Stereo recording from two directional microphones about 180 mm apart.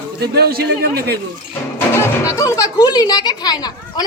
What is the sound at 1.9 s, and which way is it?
Speech, 15° left (ahead or behind).